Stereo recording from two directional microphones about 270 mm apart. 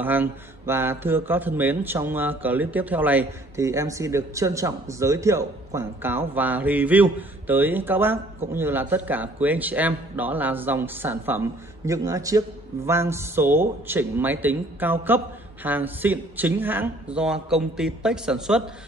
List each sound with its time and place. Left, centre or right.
0.0 s speech: centre